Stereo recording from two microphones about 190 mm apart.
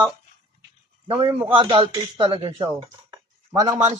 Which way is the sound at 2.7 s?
15° right (ahead or behind).